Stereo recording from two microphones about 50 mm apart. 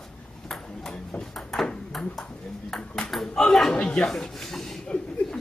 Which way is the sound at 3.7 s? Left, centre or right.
Centre.